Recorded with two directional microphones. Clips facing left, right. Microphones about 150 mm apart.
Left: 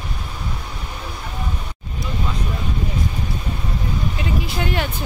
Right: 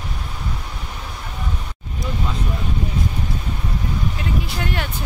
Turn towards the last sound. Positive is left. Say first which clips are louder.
# left 3 dB
turn(degrees=5)  # may be behind; listen again after turning